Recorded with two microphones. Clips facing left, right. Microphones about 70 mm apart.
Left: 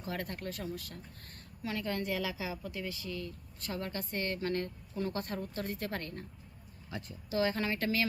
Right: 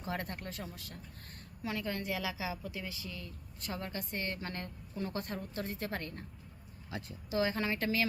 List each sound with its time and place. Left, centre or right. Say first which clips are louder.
0.0 s a woman's voice: left 1 dB; right
7.3 s a woman's voice: left 1 dB; centre